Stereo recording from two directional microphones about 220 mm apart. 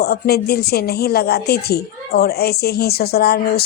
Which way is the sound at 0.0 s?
45° left (ahead or behind).